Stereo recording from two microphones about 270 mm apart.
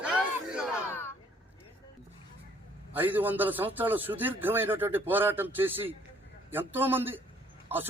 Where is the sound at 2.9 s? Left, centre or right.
Centre.